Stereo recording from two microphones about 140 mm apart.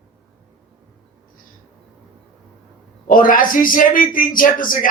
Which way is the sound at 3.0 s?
85° left.